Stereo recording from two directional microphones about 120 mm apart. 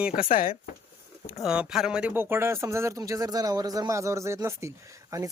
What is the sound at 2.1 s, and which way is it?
Speech, 20° right (ahead or behind).